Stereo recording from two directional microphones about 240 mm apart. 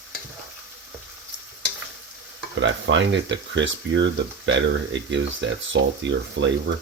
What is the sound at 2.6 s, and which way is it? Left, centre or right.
Speech, right.